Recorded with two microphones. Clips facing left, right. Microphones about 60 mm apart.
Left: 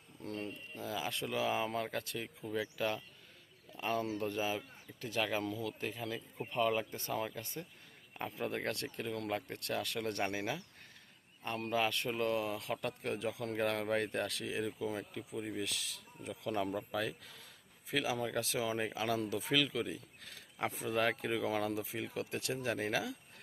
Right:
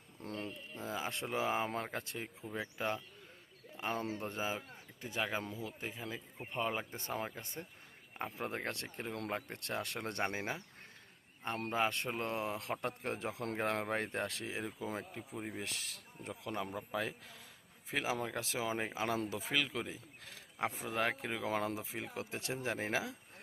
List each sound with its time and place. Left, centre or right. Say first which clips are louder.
0.2 s a sound: left 1 dB; right
0.8 s a man's voice: left 1 dB; right
13.6 s a man's voice: left 2 dB; right
16.3 s a man's voice: left 4 dB; right
20.8 s speech: left 5 dB; centre
21.4 s speech: right 2 dB; right